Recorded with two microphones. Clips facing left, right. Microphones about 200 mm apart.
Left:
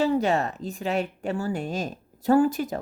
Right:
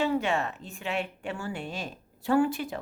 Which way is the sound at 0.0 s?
40° left (ahead or behind).